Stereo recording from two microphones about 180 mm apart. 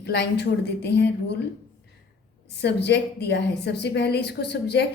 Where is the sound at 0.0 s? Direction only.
70° left (ahead or behind).